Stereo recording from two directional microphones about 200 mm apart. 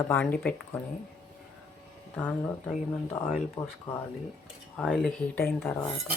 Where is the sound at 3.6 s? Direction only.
15° left (ahead or behind).